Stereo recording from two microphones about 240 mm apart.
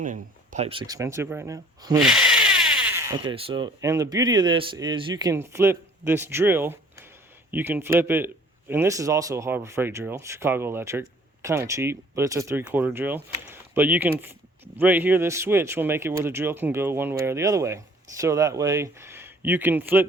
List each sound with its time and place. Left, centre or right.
0.0 s speech: right; by 2.0 s centre
2.0 s speech: centre